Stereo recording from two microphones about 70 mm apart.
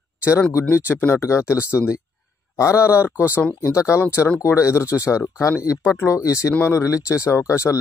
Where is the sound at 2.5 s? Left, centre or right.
Left.